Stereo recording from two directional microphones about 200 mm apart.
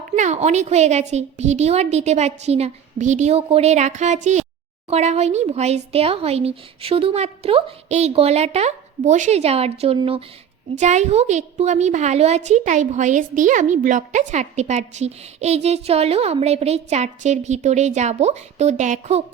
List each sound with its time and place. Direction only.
0.2 s a woman's voice: 35° right (ahead or behind)